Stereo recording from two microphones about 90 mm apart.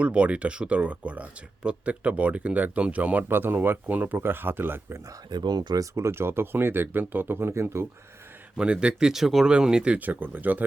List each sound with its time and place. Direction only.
0.0 s speech: 15° right (ahead or behind)
5.0 s speech: 50° right (ahead or behind); by 7.9 s 30° right (ahead or behind)
8.5 s speech: 10° right (ahead or behind)